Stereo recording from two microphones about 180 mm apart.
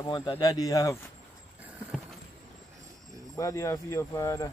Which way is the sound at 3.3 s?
15° left (ahead or behind).